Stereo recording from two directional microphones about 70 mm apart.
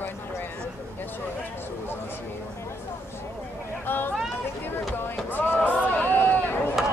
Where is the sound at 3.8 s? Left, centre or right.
Left.